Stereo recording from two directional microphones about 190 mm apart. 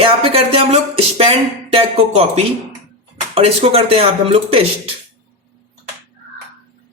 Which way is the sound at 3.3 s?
30° right (ahead or behind).